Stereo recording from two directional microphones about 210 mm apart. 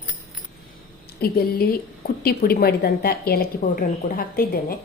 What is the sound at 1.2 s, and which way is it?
A woman's voice, 45° left (ahead or behind).